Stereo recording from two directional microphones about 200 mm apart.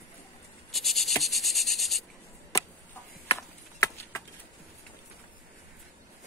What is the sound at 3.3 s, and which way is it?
Clip-clop, 15° left (ahead or behind).